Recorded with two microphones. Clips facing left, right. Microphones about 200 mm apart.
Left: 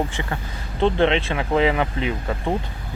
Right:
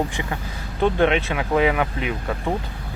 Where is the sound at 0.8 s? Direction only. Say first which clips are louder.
Even; 20° left (ahead or behind).